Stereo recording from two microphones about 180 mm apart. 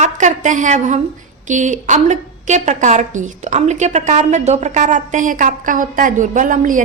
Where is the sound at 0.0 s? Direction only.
40° right (ahead or behind).